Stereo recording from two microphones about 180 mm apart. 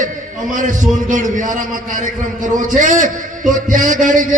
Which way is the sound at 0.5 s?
45° right (ahead or behind).